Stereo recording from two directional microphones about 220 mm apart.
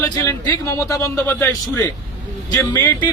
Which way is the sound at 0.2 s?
15° left (ahead or behind).